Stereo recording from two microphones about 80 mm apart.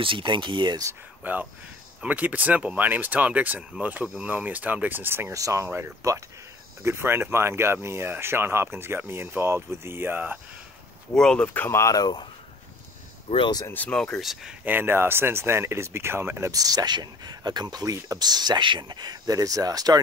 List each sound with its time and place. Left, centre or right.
0.0 s speech: right
1.2 s speech: right
5.3 s speech: right
11.1 s speech: centre
11.4 s speech: left
11.7 s speech: left
12.0 s speech: left
13.4 s speech: left
13.8 s speech: centre
14.2 s speech: centre
14.6 s speech: right
16.5 s speech: right
19.3 s speech: right